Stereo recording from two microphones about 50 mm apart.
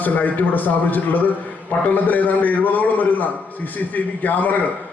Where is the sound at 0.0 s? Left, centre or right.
Left.